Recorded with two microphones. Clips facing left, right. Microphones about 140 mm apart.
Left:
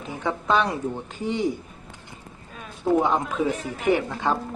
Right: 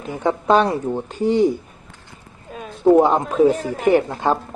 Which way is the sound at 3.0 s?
35° right (ahead or behind).